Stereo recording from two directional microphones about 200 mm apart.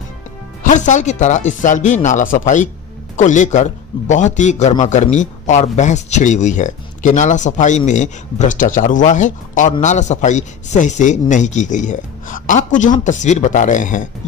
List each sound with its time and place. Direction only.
0.7 s a man's voice: 40° left (ahead or behind)